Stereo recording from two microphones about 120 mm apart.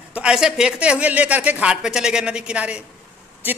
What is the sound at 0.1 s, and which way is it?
Speech, 5° right (ahead or behind).